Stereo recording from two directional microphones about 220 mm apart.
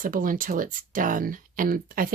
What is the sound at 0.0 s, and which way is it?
Speech, 40° right (ahead or behind).